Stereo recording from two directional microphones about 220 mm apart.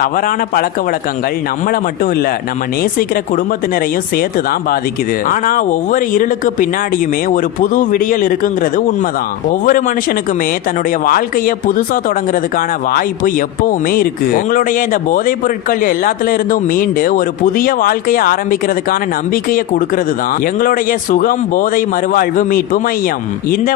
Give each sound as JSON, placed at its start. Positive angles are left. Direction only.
{"t": 0.0, "sound": "a man's voice", "side_deg": 40}
{"t": 1.6, "sound": "speech", "side_deg": 40}
{"t": 3.3, "sound": "a man's voice", "side_deg": 40}